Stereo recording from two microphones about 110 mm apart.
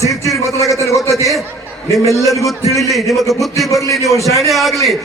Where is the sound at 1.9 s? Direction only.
30° left (ahead or behind).